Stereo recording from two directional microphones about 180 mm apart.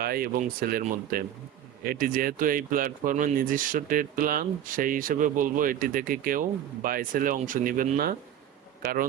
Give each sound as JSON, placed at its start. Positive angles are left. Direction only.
{"t": 0.0, "sound": "speech", "side_deg": -55}